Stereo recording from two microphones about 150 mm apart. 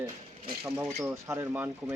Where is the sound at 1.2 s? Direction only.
15° right (ahead or behind).